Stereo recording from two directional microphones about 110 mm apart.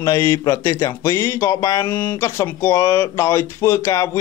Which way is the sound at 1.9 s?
20° left (ahead or behind).